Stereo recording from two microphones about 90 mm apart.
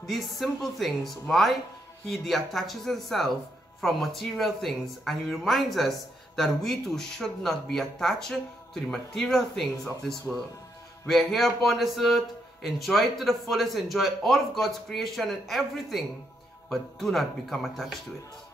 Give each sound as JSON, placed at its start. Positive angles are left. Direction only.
{"t": 0.0, "sound": "speech", "side_deg": 0}